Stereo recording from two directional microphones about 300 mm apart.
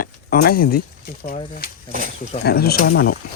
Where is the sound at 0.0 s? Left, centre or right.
Left.